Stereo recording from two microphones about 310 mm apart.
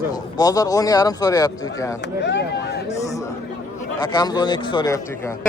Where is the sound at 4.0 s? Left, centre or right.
Centre.